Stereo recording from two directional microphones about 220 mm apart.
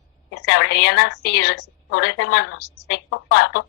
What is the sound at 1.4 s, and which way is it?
Speech, 90° left.